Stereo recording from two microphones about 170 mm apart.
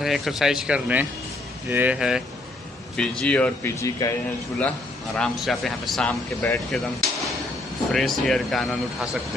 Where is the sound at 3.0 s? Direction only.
5° left (ahead or behind).